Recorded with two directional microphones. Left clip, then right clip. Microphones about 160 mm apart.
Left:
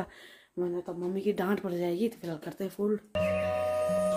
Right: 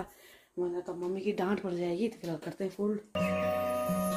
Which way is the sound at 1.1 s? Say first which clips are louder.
Left 3 dB; 20° left (ahead or behind).